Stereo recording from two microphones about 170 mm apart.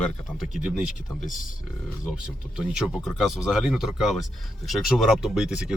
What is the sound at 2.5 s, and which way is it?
Speech, centre (ahead or behind).